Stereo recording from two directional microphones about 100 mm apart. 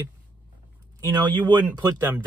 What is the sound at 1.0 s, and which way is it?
Speech, 45° right (ahead or behind).